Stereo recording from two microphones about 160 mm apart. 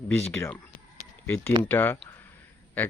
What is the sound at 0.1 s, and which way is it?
Speech, 15° left (ahead or behind).